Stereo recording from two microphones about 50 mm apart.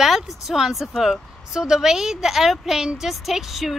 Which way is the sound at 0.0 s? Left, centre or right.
Centre.